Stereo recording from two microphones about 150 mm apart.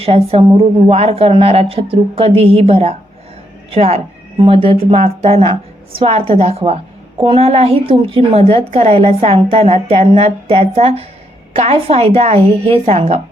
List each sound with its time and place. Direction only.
0.0 s a woman's voice: 40° right (ahead or behind)